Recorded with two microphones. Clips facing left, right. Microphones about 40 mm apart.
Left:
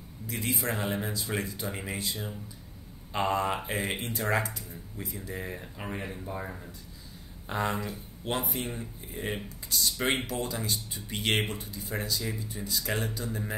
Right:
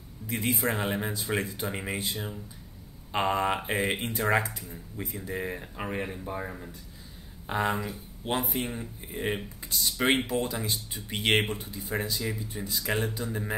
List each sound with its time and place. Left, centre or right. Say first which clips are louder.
0.3 s speech: right 3 dB; right; by 8.0 s centre
8.2 s speech: right 2 dB; centre
9.1 s speech: right 4 dB; right